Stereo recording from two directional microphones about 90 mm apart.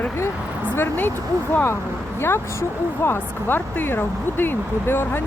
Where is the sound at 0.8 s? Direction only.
25° left (ahead or behind).